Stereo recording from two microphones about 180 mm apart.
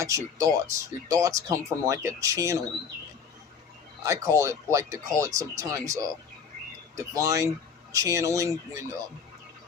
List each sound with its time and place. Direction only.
0.0 s speech: 15° right (ahead or behind)
4.0 s speech: 15° right (ahead or behind)